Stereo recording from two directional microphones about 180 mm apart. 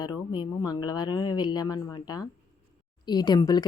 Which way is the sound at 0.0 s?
25° left (ahead or behind).